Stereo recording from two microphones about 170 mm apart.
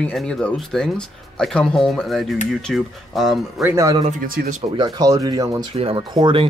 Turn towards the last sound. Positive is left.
turn(degrees=-30)  # may be behind; listen again after turning